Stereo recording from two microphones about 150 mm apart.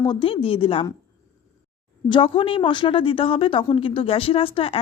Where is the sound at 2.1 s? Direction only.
35° left (ahead or behind).